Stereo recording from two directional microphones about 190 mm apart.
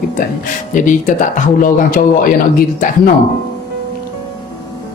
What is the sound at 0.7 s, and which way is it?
Speech, 45° left (ahead or behind).